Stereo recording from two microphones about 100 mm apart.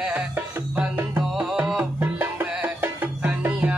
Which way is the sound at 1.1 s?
10° right (ahead or behind).